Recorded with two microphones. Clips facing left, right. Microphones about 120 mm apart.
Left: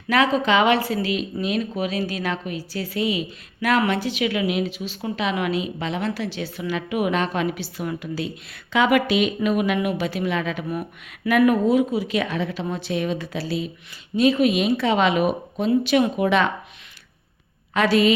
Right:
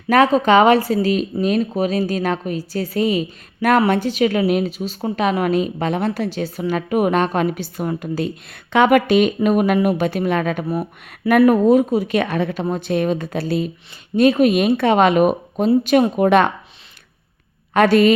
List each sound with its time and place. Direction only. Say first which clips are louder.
0.1 s a woman's voice: right 6 dB; 45° right (ahead or behind)
17.7 s a woman's voice: right 5 dB; 50° right (ahead or behind)